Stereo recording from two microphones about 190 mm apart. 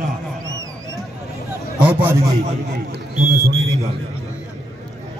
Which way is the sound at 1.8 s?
10° right (ahead or behind).